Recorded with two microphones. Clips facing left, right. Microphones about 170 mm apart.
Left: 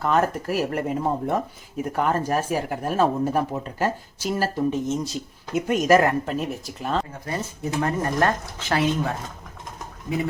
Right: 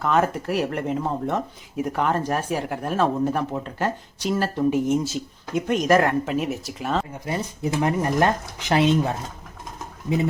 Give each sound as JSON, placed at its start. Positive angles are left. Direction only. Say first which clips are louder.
{"t": 0.0, "sound": "speech", "louder": "even", "side_deg": 0}
{"t": 7.1, "sound": "speech", "louder": "right 2 dB", "side_deg": -15}